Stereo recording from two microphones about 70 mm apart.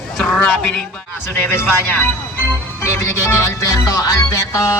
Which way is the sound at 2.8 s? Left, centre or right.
Left.